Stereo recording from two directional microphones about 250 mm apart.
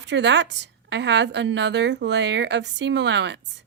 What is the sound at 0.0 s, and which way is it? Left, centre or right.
Speech, right.